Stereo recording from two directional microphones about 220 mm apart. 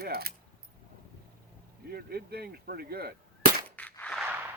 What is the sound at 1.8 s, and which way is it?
Speech, 45° right (ahead or behind).